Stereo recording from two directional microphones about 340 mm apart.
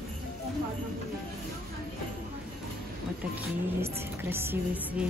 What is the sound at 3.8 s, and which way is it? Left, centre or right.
Speech, centre.